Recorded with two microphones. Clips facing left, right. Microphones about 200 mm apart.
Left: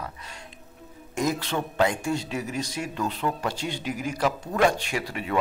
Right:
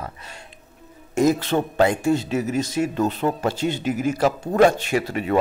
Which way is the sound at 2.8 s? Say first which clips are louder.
Right 8 dB; 45° right (ahead or behind).